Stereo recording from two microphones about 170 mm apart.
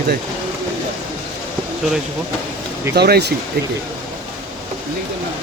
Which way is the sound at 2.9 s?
70° right (ahead or behind).